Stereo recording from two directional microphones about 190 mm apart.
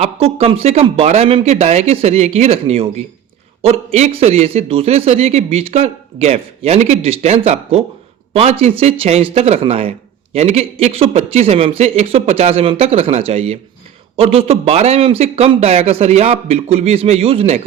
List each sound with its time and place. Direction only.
0.0 s speech: 30° right (ahead or behind)
3.9 s speech: 35° right (ahead or behind)